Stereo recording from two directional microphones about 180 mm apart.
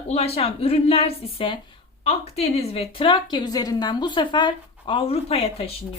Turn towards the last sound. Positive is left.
turn(degrees=35)  # may be behind; listen again after turning